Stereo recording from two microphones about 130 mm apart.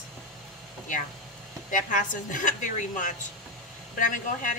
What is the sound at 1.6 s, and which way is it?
Speech, 90° left.